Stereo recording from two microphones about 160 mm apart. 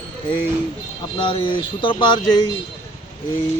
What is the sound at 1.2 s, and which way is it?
Speech, 30° left (ahead or behind).